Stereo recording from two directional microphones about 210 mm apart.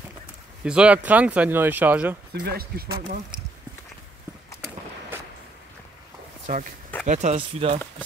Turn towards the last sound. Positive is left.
turn(degrees=-25)  # may be behind; listen again after turning